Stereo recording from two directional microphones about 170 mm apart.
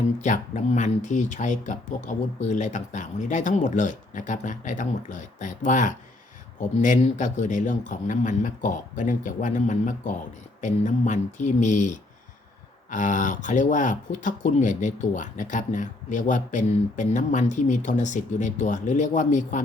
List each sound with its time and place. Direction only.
0.2 s speech: 45° left (ahead or behind)